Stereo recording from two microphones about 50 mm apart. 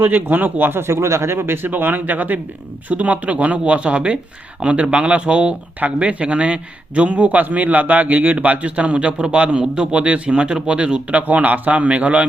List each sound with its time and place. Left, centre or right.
0.0 s speech: right
0.8 s a man's voice: right